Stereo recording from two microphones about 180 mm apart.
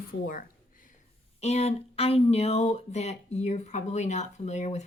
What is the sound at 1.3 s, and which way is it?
Speech, 35° left (ahead or behind).